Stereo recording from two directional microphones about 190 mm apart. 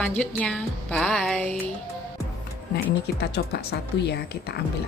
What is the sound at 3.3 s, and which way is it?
Speech, 60° left (ahead or behind).